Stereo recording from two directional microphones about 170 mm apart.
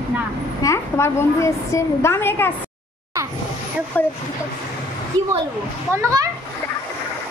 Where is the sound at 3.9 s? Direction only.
10° left (ahead or behind).